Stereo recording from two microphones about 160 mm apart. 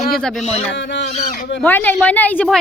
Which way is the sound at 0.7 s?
90° left.